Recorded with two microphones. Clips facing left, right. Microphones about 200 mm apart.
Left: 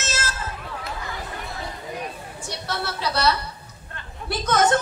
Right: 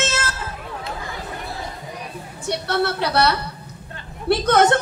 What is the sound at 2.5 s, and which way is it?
A woman's voice, 60° right (ahead or behind).